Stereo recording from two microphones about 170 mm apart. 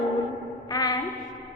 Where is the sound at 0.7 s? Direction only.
20° left (ahead or behind).